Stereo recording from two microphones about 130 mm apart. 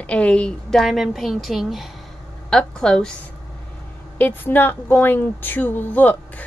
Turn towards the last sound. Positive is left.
turn(degrees=15)  # may be behind; listen again after turning